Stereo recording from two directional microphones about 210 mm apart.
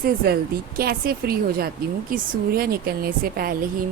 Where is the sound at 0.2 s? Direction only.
50° right (ahead or behind).